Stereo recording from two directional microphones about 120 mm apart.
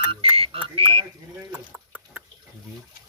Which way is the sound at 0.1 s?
50° right (ahead or behind).